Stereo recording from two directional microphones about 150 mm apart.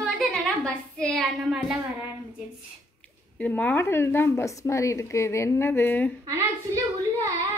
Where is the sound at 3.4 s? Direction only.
10° left (ahead or behind).